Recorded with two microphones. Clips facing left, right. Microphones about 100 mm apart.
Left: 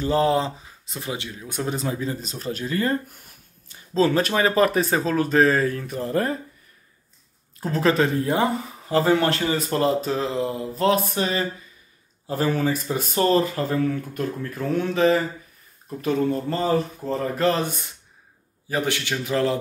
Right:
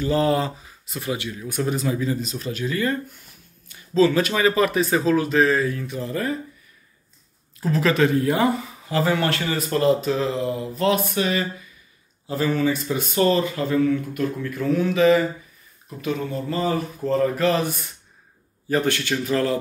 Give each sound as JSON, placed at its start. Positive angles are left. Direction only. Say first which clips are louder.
{"t": 0.0, "sound": "speech", "louder": "even", "side_deg": 30}
{"t": 7.6, "sound": "speech", "louder": "right 1 dB", "side_deg": 35}
{"t": 12.3, "sound": "speech", "louder": "right 1 dB", "side_deg": 45}
{"t": 17.0, "sound": "a man's voice", "louder": "right 4 dB", "side_deg": 15}
{"t": 17.4, "sound": "speech", "louder": "right 1 dB", "side_deg": 35}
{"t": 18.7, "sound": "a man's voice", "louder": "right 3 dB", "side_deg": 15}